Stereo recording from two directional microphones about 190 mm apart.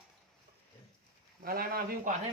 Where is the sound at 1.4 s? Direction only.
50° right (ahead or behind).